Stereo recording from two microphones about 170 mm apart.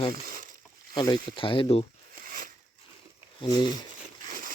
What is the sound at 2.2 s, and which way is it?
Biting, 55° right (ahead or behind).